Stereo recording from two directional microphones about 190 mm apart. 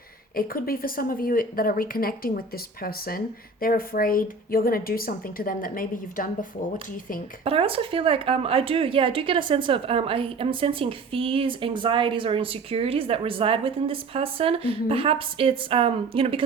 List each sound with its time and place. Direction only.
0.3 s speech: 50° left (ahead or behind)
7.4 s speech: 30° right (ahead or behind)